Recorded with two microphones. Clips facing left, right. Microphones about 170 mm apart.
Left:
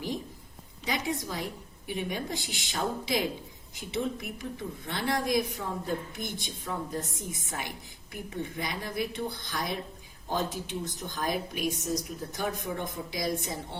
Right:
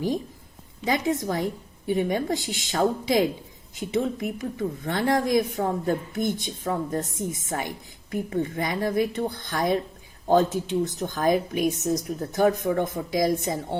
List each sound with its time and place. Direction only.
0.9 s speech: 50° right (ahead or behind)